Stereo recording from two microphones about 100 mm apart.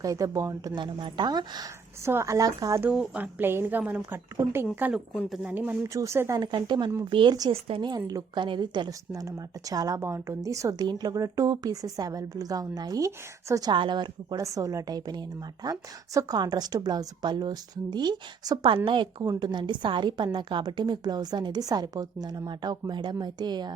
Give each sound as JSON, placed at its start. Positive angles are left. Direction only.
{"t": 0.0, "sound": "a woman's voice", "side_deg": -35}
{"t": 0.8, "sound": "a woman's voice", "side_deg": -55}
{"t": 2.0, "sound": "a woman's voice", "side_deg": -30}
{"t": 2.9, "sound": "a woman's voice", "side_deg": -10}
{"t": 5.9, "sound": "a woman's voice", "side_deg": -30}
{"t": 6.4, "sound": "a woman's voice", "side_deg": -45}
{"t": 8.4, "sound": "a woman's voice", "side_deg": -50}
{"t": 8.9, "sound": "a woman's voice", "side_deg": -35}
{"t": 13.7, "sound": "a woman's voice", "side_deg": -50}
{"t": 14.4, "sound": "a woman's voice", "side_deg": -35}